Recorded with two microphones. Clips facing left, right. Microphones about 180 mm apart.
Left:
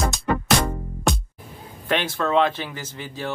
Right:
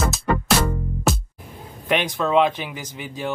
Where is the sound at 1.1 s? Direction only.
5° right (ahead or behind).